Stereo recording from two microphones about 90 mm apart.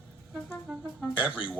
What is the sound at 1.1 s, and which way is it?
Speech, 15° right (ahead or behind).